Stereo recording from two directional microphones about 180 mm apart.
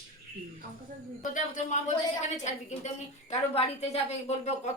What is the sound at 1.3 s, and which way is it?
Speech, 45° left (ahead or behind).